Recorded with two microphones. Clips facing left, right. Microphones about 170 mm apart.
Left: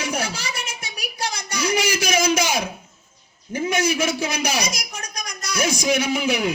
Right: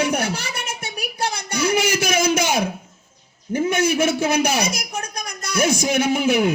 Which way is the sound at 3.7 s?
55° right (ahead or behind).